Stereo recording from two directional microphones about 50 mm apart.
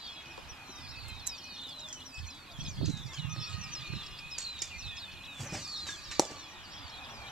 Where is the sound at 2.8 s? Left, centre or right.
Centre.